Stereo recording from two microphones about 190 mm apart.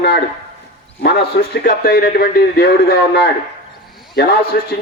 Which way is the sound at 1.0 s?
50° left (ahead or behind).